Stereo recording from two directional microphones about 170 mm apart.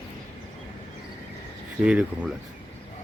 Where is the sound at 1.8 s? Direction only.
5° right (ahead or behind).